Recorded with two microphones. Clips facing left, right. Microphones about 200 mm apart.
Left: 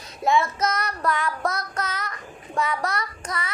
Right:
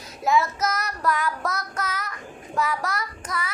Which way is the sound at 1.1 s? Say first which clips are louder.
Right 1 dB; 25° left (ahead or behind).